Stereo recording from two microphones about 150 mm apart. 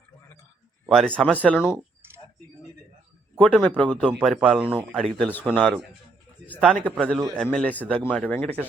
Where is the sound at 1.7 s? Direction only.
15° right (ahead or behind).